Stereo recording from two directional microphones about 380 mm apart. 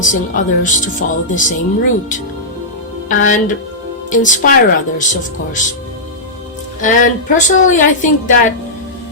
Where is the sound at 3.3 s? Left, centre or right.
Centre.